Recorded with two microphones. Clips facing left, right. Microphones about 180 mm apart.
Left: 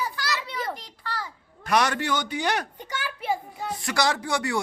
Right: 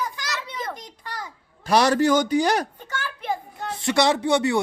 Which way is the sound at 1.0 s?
15° right (ahead or behind).